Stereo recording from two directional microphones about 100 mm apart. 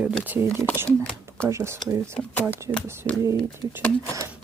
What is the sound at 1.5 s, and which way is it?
Speech, 30° right (ahead or behind).